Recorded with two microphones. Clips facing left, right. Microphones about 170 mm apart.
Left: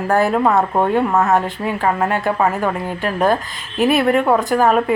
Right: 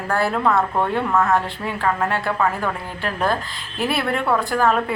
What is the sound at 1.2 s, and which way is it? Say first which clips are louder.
A woman's voice: left 3 dB; 20° left (ahead or behind).